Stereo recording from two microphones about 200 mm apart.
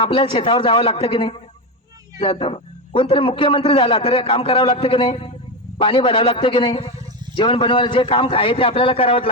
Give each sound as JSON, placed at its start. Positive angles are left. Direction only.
{"t": 0.0, "sound": "a man's voice", "side_deg": 25}